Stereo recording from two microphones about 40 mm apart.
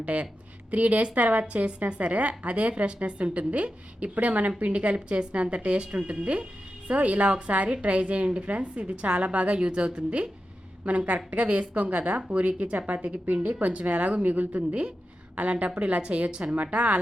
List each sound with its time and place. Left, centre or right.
0.0 s a woman's voice: right